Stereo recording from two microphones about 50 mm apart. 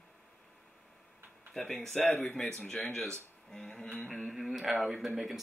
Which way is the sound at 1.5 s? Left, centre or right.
Centre.